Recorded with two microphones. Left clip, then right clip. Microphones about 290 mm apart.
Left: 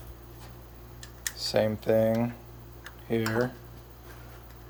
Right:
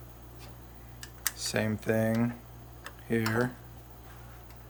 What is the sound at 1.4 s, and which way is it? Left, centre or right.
Speech, centre.